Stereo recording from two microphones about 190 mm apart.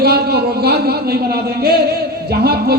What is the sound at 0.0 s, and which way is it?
Speech, 55° right (ahead or behind).